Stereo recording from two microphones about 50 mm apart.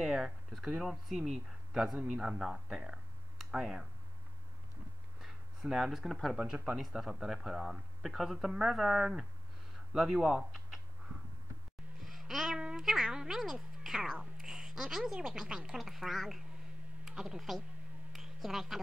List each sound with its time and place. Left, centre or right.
0.0 s speech: centre
2.0 s speech: centre
5.2 s a sound: centre
6.3 s speech: right
6.8 s speech: centre
12.1 s speech: centre
18.1 s a sound: centre